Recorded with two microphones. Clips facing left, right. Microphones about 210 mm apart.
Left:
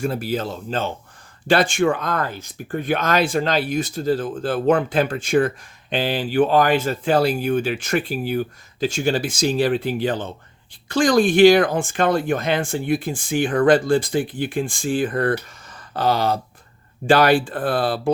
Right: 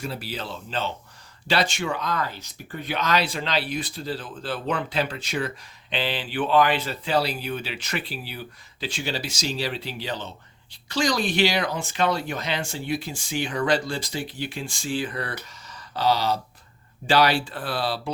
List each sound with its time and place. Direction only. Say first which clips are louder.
0.0 s speech: left 9 dB; 50° left (ahead or behind)